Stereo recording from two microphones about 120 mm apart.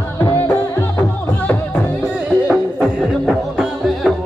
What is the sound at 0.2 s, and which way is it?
Music, 20° left (ahead or behind).